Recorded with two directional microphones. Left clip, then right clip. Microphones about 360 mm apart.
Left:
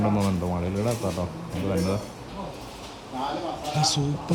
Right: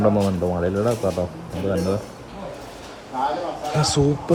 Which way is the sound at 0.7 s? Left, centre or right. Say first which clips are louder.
Right 6 dB; centre.